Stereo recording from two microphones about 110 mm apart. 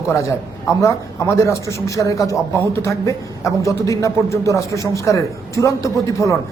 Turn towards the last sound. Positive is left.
turn(degrees=30)  # may be behind; listen again after turning